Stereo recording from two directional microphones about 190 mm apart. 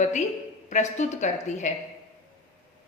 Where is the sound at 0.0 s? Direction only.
40° left (ahead or behind).